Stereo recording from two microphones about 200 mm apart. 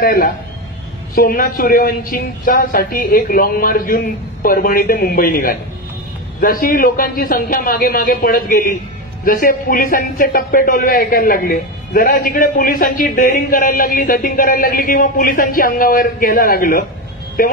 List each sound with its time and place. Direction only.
0.0 s a man's voice: 45° left (ahead or behind)